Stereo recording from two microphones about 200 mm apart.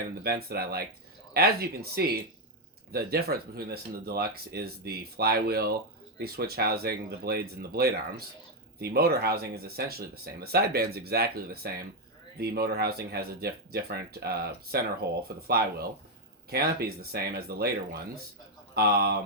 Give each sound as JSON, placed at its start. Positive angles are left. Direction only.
{"t": 0.2, "sound": "speech", "side_deg": -50}